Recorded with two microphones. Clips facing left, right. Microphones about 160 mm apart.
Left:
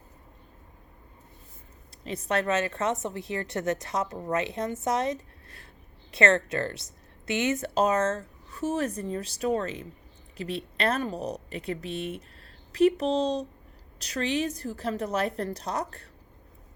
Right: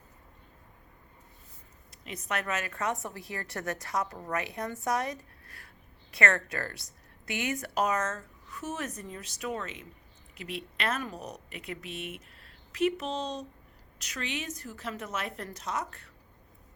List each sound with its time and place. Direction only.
1.9 s a woman's voice: 30° left (ahead or behind)